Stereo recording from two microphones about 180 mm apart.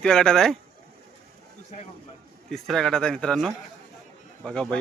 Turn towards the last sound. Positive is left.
turn(degrees=5)  # may be behind; listen again after turning